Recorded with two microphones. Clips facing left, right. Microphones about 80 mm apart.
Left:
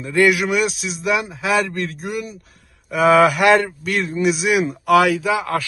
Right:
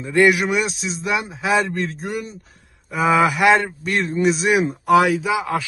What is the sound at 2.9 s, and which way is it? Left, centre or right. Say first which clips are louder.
Speech: left 4 dB; centre.